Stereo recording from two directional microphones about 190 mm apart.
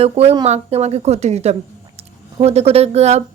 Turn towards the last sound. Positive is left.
turn(degrees=-35)  # may be behind; listen again after turning